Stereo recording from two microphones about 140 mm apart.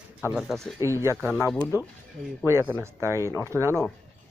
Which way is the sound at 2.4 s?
15° right (ahead or behind).